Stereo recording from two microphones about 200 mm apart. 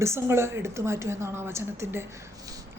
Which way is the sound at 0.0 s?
15° right (ahead or behind).